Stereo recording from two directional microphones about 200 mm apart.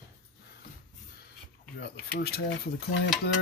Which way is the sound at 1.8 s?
50° left (ahead or behind).